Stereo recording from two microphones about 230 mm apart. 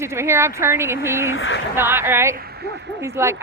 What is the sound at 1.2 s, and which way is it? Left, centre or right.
Speech, left.